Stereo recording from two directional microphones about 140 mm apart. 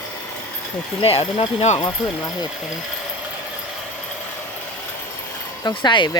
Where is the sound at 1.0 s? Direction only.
40° left (ahead or behind).